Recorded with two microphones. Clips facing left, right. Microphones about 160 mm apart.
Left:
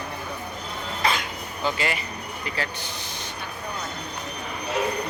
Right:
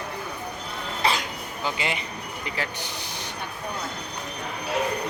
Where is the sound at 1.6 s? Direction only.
15° right (ahead or behind).